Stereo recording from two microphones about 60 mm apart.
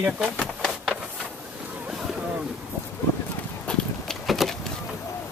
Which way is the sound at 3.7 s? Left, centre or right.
Centre.